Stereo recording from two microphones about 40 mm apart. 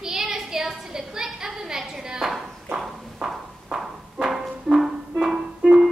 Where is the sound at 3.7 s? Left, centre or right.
Centre.